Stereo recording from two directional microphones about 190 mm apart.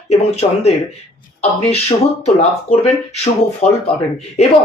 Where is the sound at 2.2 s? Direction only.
35° left (ahead or behind).